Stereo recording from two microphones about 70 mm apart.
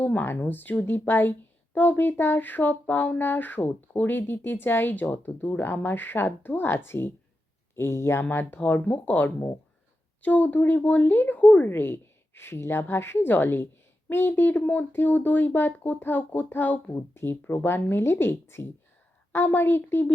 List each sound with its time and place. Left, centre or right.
0.0 s a woman's voice: left
8.2 s a woman's voice: left